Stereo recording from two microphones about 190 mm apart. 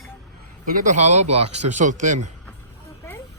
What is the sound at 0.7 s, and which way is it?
A man's voice, 45° right (ahead or behind).